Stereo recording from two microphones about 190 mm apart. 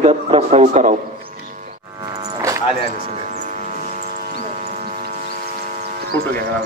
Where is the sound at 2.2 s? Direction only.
15° right (ahead or behind).